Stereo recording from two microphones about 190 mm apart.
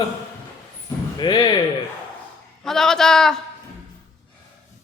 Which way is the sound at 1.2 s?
20° left (ahead or behind).